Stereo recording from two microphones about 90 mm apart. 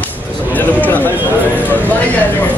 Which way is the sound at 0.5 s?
20° left (ahead or behind).